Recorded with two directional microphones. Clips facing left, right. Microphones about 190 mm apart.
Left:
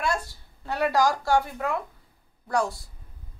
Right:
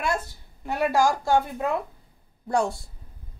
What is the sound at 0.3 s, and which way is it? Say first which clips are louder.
A woman's voice: right 1 dB; 15° right (ahead or behind).